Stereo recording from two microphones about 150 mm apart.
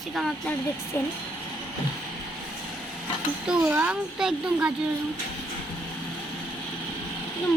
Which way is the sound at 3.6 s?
15° right (ahead or behind).